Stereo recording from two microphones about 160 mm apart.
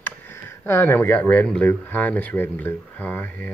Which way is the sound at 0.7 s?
15° left (ahead or behind).